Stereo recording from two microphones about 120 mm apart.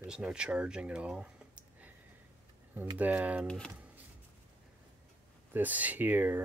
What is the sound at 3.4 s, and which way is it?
Speech, 10° left (ahead or behind).